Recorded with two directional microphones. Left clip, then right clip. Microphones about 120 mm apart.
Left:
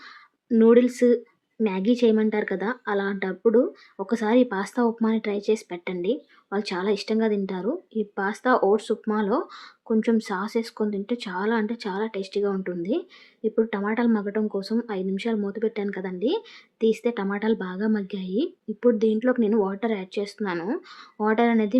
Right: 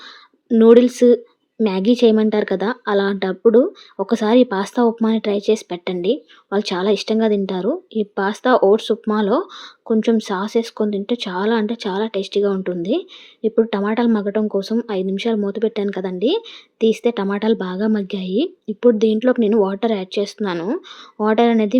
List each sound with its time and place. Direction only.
0.4 s speech: 30° right (ahead or behind)